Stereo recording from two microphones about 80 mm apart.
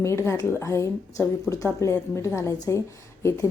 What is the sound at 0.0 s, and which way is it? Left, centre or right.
A woman's voice, left.